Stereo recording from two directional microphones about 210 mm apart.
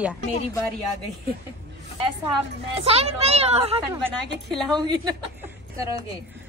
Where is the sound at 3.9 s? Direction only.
10° right (ahead or behind).